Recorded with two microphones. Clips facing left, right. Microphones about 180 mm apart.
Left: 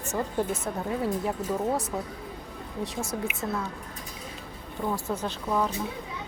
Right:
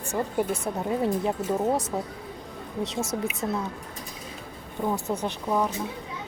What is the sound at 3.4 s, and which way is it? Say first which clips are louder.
Speech: right 3 dB; 20° right (ahead or behind).